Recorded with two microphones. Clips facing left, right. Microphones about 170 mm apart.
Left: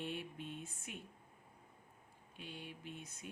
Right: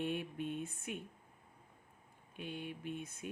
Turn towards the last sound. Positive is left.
turn(degrees=-55)  # may be behind; listen again after turning